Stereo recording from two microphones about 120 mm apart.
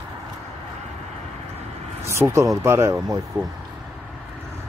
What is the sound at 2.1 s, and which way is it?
Speech, 25° right (ahead or behind).